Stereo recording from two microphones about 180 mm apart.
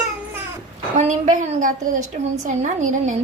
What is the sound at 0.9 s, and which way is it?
A woman's voice, 45° right (ahead or behind).